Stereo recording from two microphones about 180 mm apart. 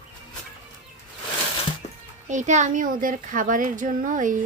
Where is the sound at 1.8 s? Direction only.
35° left (ahead or behind).